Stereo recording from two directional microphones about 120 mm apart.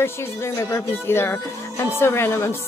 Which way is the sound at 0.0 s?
20° left (ahead or behind).